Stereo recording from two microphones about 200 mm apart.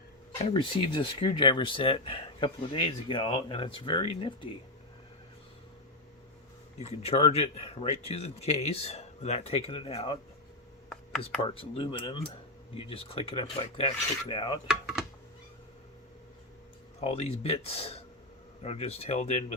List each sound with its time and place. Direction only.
0.4 s speech: 25° left (ahead or behind)
6.7 s speech: 30° left (ahead or behind)
11.4 s speech: 25° left (ahead or behind)
14.7 s a sound: 5° right (ahead or behind)
17.0 s speech: 30° left (ahead or behind)